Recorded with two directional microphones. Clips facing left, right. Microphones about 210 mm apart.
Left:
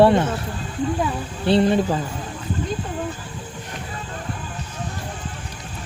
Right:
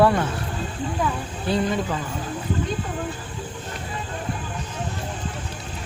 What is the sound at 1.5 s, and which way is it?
Speech, 30° left (ahead or behind).